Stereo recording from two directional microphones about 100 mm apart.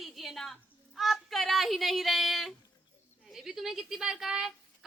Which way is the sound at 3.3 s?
5° right (ahead or behind).